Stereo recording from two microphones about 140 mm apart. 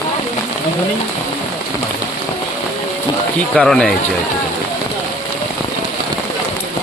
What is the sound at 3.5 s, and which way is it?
Speech, centre (ahead or behind).